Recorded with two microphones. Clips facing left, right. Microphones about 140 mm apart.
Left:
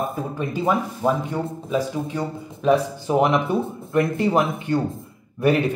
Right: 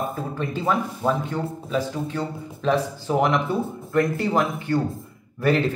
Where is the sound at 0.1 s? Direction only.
15° left (ahead or behind).